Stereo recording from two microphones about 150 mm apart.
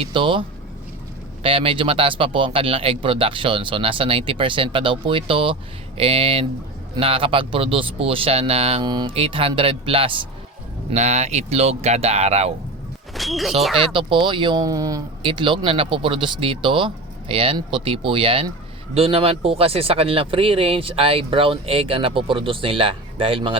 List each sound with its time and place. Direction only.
0.0 s speech: 35° right (ahead or behind)
10.9 s speech: 45° right (ahead or behind)
13.1 s speech: centre (ahead or behind)
13.7 s speech: 35° right (ahead or behind)
15.2 s speech: 35° right (ahead or behind)